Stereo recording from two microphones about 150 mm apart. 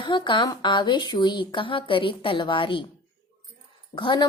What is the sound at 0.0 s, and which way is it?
Speech, 30° left (ahead or behind).